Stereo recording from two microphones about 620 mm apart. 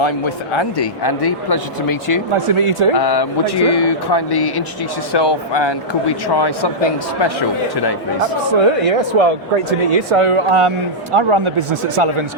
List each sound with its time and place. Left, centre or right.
0.5 s speech: left
2.3 s speech: right
2.9 s speech: left
8.8 s speech: right